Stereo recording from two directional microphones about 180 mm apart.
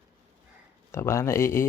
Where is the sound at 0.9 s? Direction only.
15° left (ahead or behind).